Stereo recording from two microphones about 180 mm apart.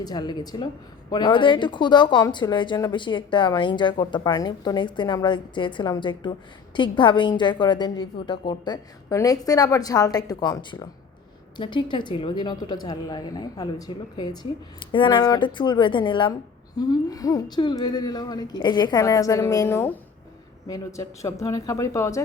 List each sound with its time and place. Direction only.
0.0 s speech: 25° left (ahead or behind)